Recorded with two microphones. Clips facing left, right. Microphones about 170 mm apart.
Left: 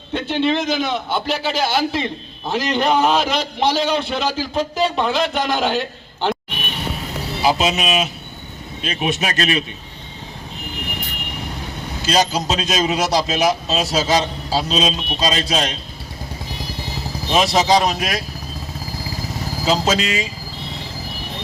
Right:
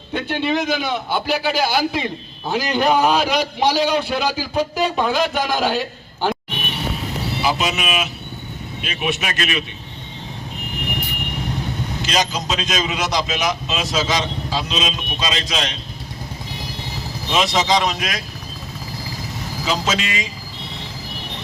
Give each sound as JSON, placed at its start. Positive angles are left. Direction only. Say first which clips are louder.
{"t": 0.1, "sound": "a man's voice", "louder": "left 2 dB", "side_deg": -5}
{"t": 7.4, "sound": "a man's voice", "louder": "left 4 dB", "side_deg": 35}
{"t": 12.1, "sound": "a man's voice", "louder": "left 4 dB", "side_deg": 35}
{"t": 17.3, "sound": "a man's voice", "louder": "left 3 dB", "side_deg": 35}
{"t": 19.6, "sound": "a man's voice", "louder": "left 4 dB", "side_deg": 35}